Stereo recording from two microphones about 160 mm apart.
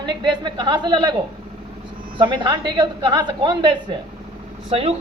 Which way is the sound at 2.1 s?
30° right (ahead or behind).